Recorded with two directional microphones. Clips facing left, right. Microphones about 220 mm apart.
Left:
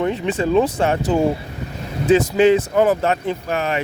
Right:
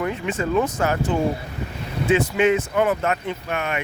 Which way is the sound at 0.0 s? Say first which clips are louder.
Left 5 dB; 35° left (ahead or behind).